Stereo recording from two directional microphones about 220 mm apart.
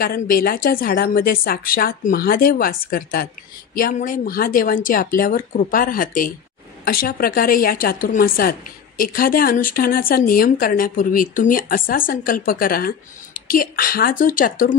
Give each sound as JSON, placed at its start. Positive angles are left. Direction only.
{"t": 0.0, "sound": "a woman's voice", "side_deg": 40}